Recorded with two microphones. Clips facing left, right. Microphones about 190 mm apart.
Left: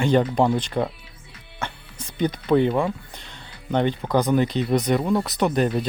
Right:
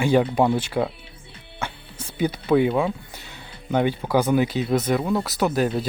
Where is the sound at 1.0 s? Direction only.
30° right (ahead or behind).